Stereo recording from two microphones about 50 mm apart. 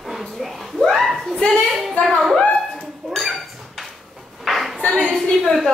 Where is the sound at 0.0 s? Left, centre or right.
Centre.